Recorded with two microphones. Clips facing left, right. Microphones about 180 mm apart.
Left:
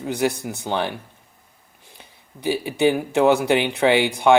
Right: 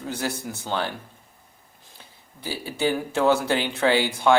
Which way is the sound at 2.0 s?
20° left (ahead or behind).